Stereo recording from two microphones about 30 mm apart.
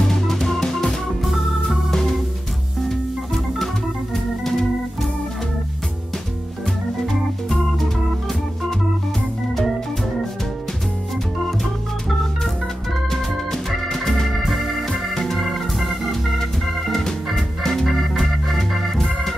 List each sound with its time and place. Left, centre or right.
0.0 s music: centre
1.2 s organ: centre
13.1 s music: centre
13.9 s organ: centre
14.4 s organ: centre
14.9 s organ: centre
15.3 s organ: centre